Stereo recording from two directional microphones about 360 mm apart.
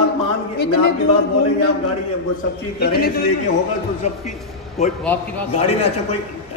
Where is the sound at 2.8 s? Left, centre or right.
Left.